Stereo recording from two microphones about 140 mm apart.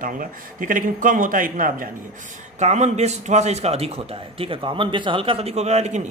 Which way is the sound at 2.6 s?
55° right (ahead or behind).